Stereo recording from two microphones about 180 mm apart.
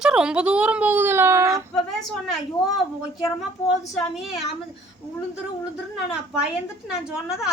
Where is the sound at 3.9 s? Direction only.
Centre (ahead or behind).